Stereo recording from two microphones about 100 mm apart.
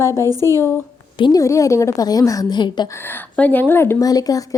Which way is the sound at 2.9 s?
20° left (ahead or behind).